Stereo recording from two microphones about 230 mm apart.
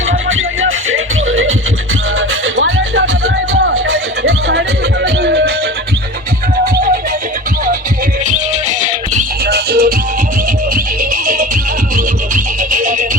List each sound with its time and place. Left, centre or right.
0.3 s music: right
9.1 s music: right